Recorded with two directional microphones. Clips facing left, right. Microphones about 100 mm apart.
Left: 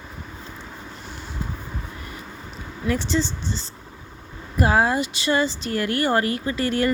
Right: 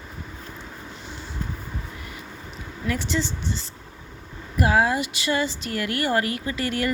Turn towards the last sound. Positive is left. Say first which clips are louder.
# left 4 dB
turn(degrees=35)  # may be behind; listen again after turning